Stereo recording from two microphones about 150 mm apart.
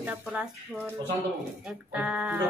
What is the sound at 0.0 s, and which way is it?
Speech, 10° right (ahead or behind).